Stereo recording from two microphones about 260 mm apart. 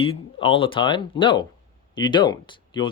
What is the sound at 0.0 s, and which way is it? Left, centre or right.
Speech, left.